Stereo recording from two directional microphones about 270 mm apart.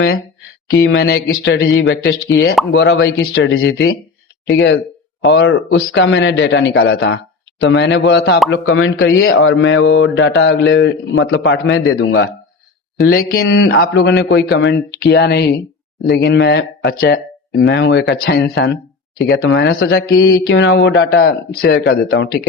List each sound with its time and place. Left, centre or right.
0.9 s speech: left